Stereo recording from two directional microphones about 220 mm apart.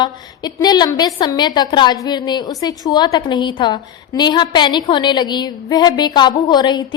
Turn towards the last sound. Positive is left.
turn(degrees=20)  # may be behind; listen again after turning